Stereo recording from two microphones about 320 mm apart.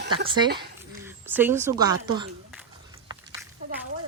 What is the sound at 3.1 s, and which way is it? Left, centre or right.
Walk, centre.